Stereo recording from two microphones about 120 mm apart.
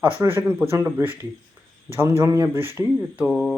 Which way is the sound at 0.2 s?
20° right (ahead or behind).